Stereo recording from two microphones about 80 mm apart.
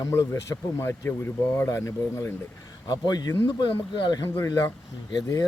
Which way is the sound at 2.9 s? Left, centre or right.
Left.